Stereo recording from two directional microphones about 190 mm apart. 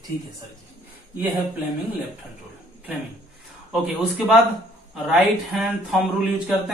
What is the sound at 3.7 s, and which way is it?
Speech, 5° right (ahead or behind).